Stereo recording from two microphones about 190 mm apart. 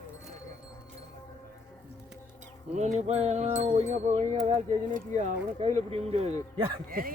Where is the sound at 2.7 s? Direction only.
35° right (ahead or behind).